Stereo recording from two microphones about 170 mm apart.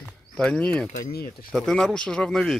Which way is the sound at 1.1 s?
60° left (ahead or behind).